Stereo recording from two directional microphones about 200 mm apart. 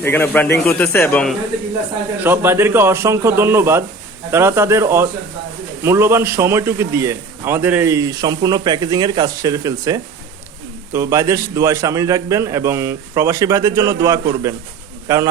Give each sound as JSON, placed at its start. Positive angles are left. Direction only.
{"t": 0.0, "sound": "speech", "side_deg": 10}
{"t": 2.2, "sound": "a man's voice", "side_deg": -10}